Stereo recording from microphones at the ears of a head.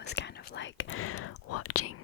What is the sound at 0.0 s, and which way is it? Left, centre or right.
Whispering, left.